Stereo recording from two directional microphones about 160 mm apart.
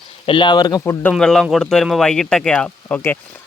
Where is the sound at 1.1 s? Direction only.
5° left (ahead or behind).